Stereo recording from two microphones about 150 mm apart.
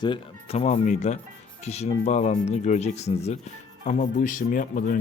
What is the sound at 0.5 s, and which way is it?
A man's voice, 50° left (ahead or behind).